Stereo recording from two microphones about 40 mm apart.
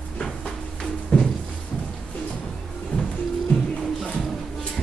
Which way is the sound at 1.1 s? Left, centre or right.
Left.